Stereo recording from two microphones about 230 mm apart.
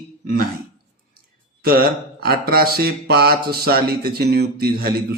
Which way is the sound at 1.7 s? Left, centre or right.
Right.